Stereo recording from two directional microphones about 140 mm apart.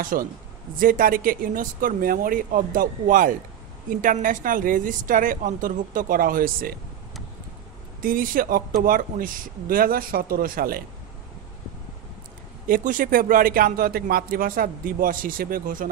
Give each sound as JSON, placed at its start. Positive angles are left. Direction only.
{"t": 0.0, "sound": "speech", "side_deg": -85}
{"t": 8.0, "sound": "a man's voice", "side_deg": -90}
{"t": 12.6, "sound": "a man's voice", "side_deg": -75}